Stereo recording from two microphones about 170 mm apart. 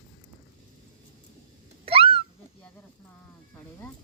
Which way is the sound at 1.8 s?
35° right (ahead or behind).